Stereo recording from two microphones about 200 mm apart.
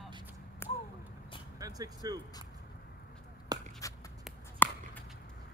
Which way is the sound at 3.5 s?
20° right (ahead or behind).